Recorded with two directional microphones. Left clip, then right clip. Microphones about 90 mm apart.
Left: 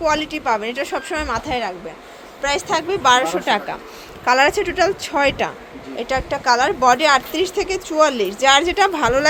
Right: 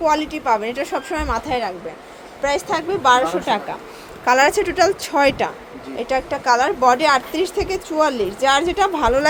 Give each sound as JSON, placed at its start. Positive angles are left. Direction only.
{"t": 0.0, "sound": "a woman's voice", "side_deg": -5}
{"t": 2.4, "sound": "speech", "side_deg": 0}
{"t": 4.3, "sound": "a woman's voice", "side_deg": -20}
{"t": 6.0, "sound": "speech", "side_deg": 0}